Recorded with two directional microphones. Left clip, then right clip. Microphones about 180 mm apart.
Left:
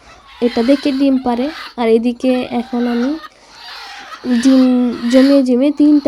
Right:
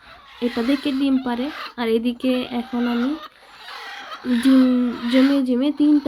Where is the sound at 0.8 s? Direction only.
35° left (ahead or behind).